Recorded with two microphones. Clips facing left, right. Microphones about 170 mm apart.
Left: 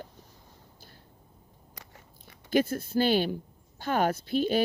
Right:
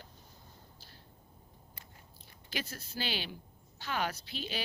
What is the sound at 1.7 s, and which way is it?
Biting, 90° left.